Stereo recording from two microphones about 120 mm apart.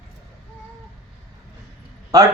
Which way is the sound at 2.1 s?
30° right (ahead or behind).